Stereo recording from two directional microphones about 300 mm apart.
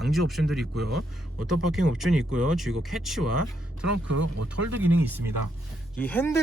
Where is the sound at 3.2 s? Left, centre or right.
Right.